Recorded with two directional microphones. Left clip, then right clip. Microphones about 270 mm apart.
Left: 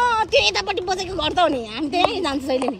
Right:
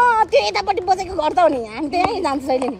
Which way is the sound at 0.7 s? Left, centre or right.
Centre.